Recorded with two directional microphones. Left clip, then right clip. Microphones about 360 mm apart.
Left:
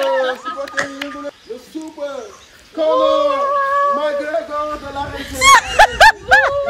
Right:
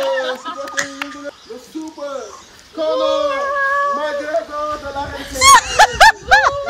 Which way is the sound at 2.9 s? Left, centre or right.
Centre.